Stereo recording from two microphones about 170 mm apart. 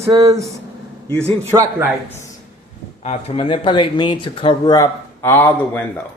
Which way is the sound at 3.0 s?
40° left (ahead or behind).